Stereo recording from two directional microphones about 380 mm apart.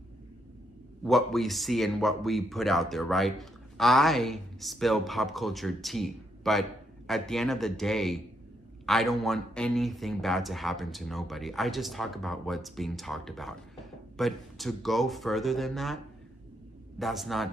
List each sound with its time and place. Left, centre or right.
1.0 s speech: centre
17.0 s speech: centre